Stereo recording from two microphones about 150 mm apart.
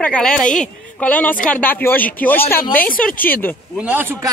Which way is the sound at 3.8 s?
10° right (ahead or behind).